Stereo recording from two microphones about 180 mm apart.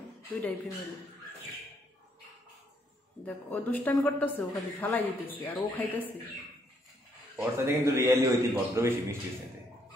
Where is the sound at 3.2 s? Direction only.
10° left (ahead or behind).